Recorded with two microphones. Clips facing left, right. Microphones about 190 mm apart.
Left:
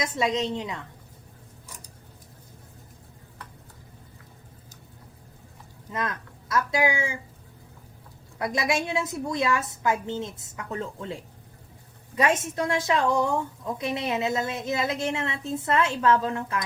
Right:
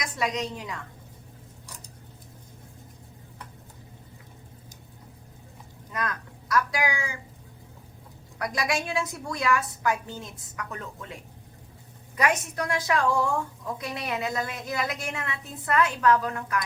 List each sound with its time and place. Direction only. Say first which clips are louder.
0.0 s a woman's voice: left 4 dB; 25° left (ahead or behind)
5.9 s speech: left 1 dB; 25° left (ahead or behind)
8.4 s a woman's voice: left 2 dB; 25° left (ahead or behind)